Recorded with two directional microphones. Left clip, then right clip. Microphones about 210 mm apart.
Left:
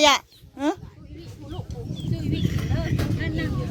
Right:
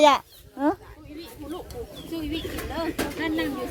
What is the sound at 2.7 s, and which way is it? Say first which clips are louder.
Pigeon: right 5 dB; 45° right (ahead or behind).